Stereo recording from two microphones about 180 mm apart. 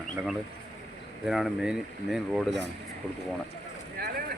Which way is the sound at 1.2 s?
5° right (ahead or behind).